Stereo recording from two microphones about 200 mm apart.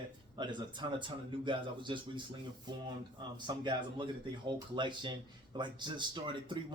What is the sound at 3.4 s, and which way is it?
Speech, 20° right (ahead or behind).